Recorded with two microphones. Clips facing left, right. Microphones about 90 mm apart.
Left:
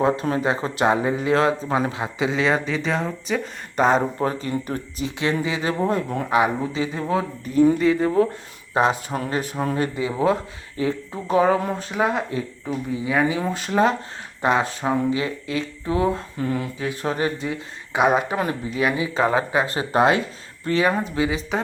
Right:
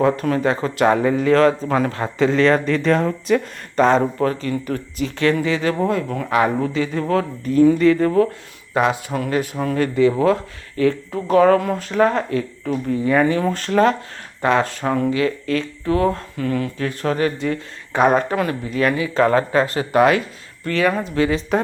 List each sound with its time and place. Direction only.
0.0 s speech: 20° left (ahead or behind)
4.2 s speech: 20° left (ahead or behind)
8.7 s speech: 30° left (ahead or behind)
17.5 s speech: 10° left (ahead or behind)
18.3 s speech: 20° left (ahead or behind)
19.1 s speech: 10° left (ahead or behind)
21.2 s speech: 10° left (ahead or behind)